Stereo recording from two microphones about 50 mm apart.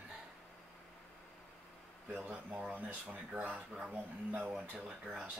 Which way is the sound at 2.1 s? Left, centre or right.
Right.